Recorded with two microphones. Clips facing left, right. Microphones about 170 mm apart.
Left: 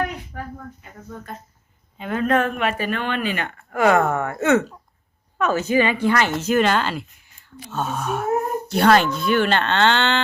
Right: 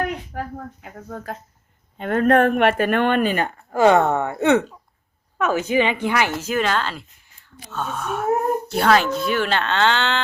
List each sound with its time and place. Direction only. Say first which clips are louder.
0.3 s speech: right 3 dB; 75° right (ahead or behind)
2.0 s speech: right 4 dB; 55° right (ahead or behind)
3.7 s a woman's voice: right 2 dB; 25° right (ahead or behind)
6.4 s speech: left 3 dB; centre (ahead or behind)